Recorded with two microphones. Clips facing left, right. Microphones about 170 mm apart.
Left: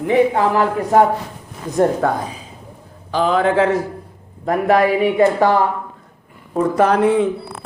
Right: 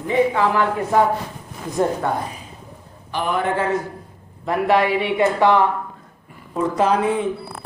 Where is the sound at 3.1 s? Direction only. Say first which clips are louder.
Left 6 dB; 90° left.